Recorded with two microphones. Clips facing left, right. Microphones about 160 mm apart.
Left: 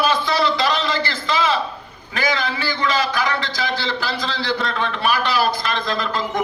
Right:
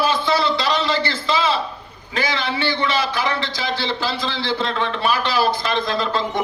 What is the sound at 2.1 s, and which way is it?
A man's voice, 25° right (ahead or behind).